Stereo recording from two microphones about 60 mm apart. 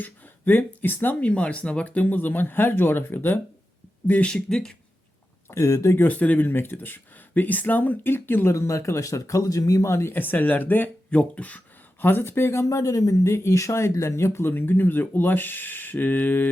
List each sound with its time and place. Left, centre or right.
0.0 s speech: left
1.2 s speech: left
4.2 s speech: centre
5.5 s speech: left
6.0 s speech: left
8.5 s speech: left
9.9 s speech: left
12.6 s speech: left